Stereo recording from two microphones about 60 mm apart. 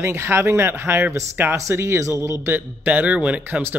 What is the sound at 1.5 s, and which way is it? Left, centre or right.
A man's voice, right.